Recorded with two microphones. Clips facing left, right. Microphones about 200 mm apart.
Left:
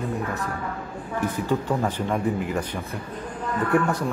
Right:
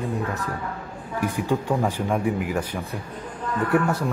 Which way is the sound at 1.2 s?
15° right (ahead or behind).